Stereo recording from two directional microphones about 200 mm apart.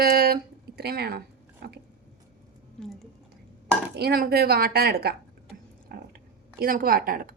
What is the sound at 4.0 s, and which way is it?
A woman's voice, 50° right (ahead or behind).